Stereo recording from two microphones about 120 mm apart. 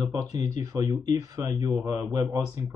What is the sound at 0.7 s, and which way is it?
Speech, 30° right (ahead or behind).